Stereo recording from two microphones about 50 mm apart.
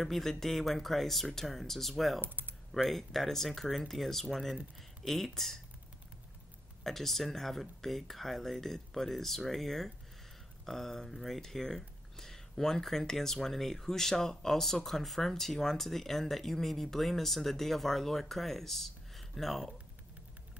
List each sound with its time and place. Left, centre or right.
0.0 s speech: centre
2.2 s typing: right
2.7 s speech: centre
6.8 s speech: centre